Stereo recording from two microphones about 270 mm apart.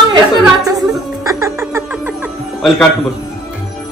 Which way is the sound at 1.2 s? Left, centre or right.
Centre.